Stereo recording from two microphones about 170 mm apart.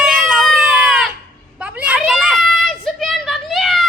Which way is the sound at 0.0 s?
Centre (ahead or behind).